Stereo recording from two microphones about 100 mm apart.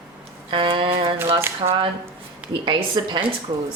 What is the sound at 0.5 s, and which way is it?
Speech, 60° right (ahead or behind).